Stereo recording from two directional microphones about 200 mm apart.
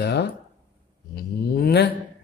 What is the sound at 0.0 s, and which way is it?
Speech, 60° left (ahead or behind).